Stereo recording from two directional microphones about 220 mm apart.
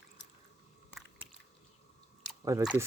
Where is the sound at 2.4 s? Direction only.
15° right (ahead or behind).